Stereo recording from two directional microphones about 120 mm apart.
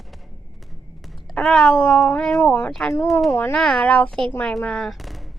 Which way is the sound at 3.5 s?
5° left (ahead or behind).